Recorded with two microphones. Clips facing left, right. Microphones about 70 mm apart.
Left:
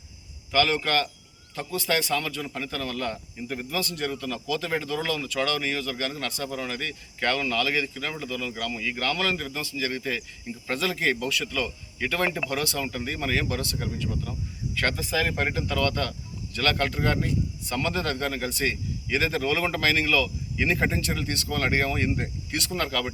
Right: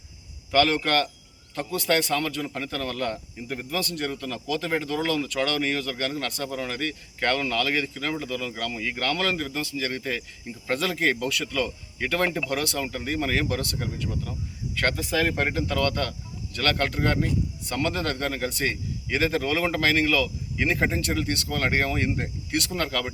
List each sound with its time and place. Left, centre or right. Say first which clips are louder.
0.5 s speech: right 2 dB; right
9.6 s speech: right 1 dB; right